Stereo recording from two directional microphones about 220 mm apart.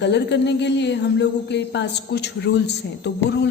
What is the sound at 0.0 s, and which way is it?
A woman's voice, 50° left (ahead or behind).